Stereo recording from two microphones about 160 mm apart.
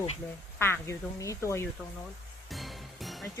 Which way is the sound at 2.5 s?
Centre (ahead or behind).